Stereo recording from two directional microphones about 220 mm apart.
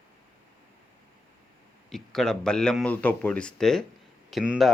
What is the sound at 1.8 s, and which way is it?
Speech, centre (ahead or behind).